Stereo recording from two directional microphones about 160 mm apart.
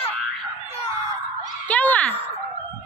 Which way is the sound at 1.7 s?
10° left (ahead or behind).